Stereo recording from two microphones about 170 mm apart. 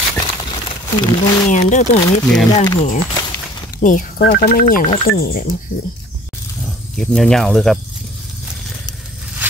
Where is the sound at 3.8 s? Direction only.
50° left (ahead or behind).